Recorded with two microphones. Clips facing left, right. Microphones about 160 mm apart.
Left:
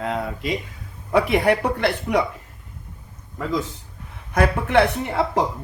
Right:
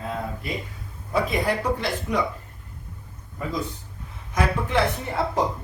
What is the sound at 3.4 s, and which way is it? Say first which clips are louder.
Speech: left 4 dB; 90° left.